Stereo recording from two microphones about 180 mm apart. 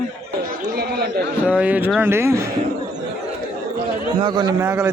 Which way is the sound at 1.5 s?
10° right (ahead or behind).